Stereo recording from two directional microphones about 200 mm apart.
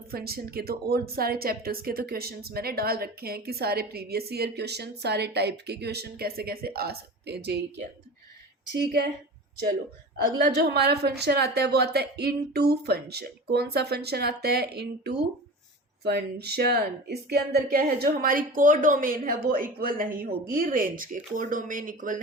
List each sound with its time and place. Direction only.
0.1 s speech: 50° right (ahead or behind)
10.3 s speech: 55° right (ahead or behind)